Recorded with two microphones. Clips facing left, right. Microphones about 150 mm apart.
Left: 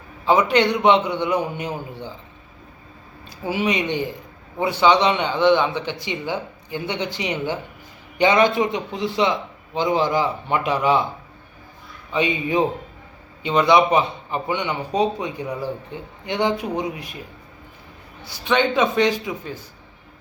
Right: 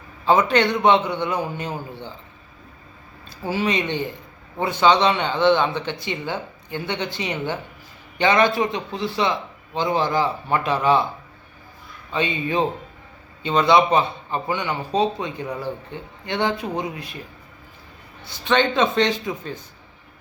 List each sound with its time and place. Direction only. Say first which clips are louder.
0.3 s a man's voice: left 1 dB; 15° left (ahead or behind)
3.2 s a man's voice: left 1 dB; 15° left (ahead or behind)
12.1 s a man's voice: left 2 dB; 15° left (ahead or behind)
18.3 s a man's voice: even; 10° left (ahead or behind)